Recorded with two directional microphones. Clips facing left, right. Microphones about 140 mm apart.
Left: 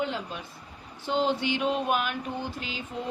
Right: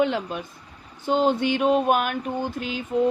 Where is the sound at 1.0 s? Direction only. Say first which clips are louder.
Right 5 dB; 50° right (ahead or behind).